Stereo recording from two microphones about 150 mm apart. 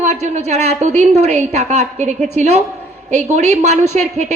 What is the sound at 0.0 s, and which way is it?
A woman's voice, 50° right (ahead or behind).